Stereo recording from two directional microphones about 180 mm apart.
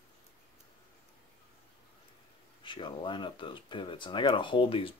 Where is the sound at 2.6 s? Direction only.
25° left (ahead or behind).